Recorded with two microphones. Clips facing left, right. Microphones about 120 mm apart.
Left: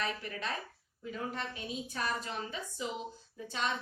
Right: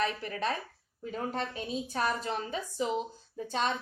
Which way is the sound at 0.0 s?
35° right (ahead or behind).